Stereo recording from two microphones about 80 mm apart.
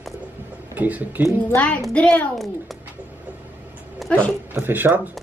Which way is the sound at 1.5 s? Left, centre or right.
Centre.